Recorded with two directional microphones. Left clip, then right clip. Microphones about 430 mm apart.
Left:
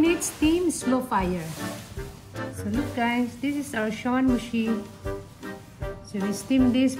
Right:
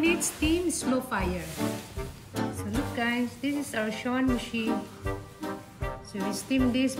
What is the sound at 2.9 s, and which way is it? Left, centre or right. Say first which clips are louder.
Music: left 4 dB; left.